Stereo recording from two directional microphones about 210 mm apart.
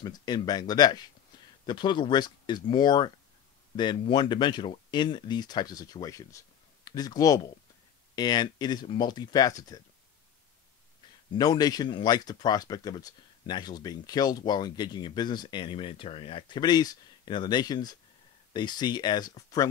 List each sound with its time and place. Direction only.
0.0 s speech: 20° left (ahead or behind)
11.3 s speech: 20° left (ahead or behind)